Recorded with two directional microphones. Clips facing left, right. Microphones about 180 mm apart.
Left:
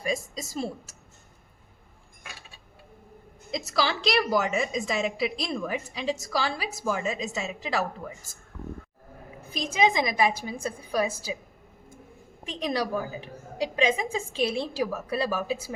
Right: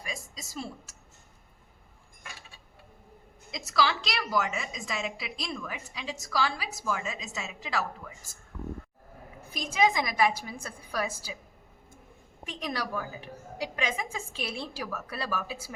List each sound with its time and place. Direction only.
0.0 s a sound: 30° left (ahead or behind)
3.5 s a woman's voice: 30° left (ahead or behind)
9.5 s a woman's voice: 20° left (ahead or behind)
12.5 s a woman's voice: 25° left (ahead or behind)